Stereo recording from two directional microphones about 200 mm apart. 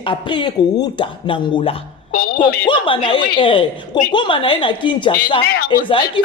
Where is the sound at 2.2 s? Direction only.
50° left (ahead or behind).